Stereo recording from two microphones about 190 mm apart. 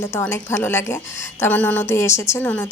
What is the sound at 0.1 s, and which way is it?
Speech, 10° left (ahead or behind).